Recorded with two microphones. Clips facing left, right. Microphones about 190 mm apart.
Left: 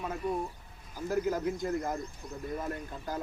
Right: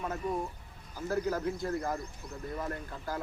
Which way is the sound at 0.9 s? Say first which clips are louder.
Left 1 dB; 15° left (ahead or behind).